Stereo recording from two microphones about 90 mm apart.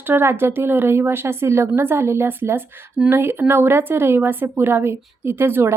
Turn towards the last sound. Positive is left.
turn(degrees=-25)  # may be behind; listen again after turning